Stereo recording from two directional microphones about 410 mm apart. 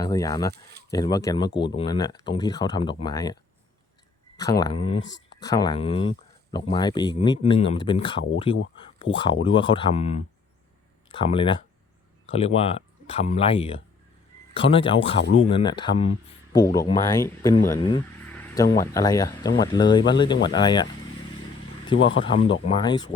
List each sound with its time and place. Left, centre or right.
0.0 s speech: centre
0.5 s speech: right
0.9 s speech: centre
4.4 s speech: centre
5.0 s speech: left
5.4 s speech: centre
21.9 s speech: left
22.2 s speech: centre